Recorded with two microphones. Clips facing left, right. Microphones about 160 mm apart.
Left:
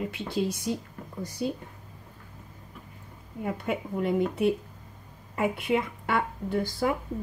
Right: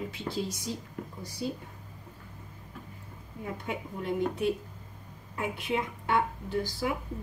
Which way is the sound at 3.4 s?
65° left (ahead or behind).